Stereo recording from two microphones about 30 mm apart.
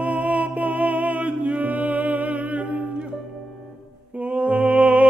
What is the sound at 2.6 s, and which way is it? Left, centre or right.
Music, right.